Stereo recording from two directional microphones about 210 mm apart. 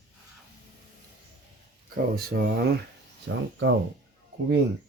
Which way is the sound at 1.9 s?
45° right (ahead or behind).